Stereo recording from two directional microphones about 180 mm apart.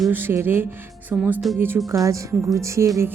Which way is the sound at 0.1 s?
10° right (ahead or behind).